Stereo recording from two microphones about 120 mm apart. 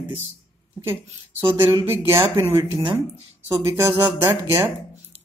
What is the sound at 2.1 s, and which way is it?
Speech, 20° right (ahead or behind).